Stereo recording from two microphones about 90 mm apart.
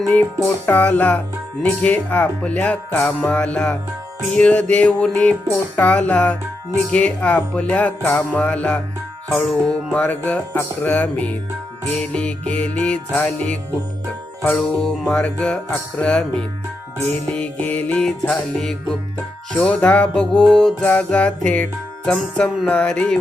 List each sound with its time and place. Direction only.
0.4 s music: 20° left (ahead or behind)
9.4 s music: centre (ahead or behind)
9.9 s music: 15° left (ahead or behind)
17.3 s music: 15° left (ahead or behind)
18.0 s music: 5° left (ahead or behind)